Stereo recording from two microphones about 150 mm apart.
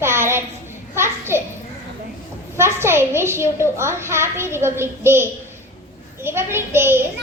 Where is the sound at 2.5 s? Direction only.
15° right (ahead or behind).